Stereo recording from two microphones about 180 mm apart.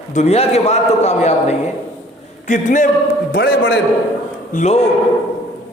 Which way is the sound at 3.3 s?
60° left (ahead or behind).